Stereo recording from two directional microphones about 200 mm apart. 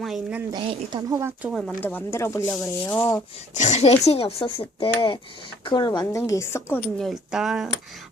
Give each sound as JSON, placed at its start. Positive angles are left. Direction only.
{"t": 0.0, "sound": "a woman's voice", "side_deg": -5}
{"t": 0.5, "sound": "speech", "side_deg": -25}
{"t": 1.8, "sound": "speech", "side_deg": 10}
{"t": 3.5, "sound": "speech", "side_deg": 35}
{"t": 7.0, "sound": "speech", "side_deg": 0}